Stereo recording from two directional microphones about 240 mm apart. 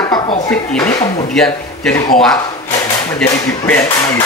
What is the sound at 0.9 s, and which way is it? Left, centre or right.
Speech, centre.